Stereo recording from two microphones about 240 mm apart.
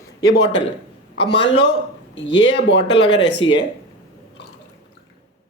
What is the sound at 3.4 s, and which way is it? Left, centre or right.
Speech, centre.